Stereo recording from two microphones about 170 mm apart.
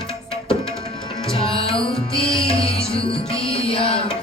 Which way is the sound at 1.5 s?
35° left (ahead or behind).